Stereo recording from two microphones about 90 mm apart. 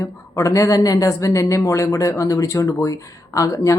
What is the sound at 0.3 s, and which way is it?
A woman's voice, 35° left (ahead or behind).